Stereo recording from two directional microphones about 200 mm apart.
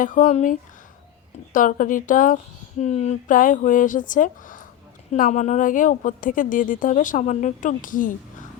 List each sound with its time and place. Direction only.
0.0 s a woman's voice: 40° left (ahead or behind)